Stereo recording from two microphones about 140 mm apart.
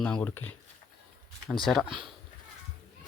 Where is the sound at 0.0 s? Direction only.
10° left (ahead or behind).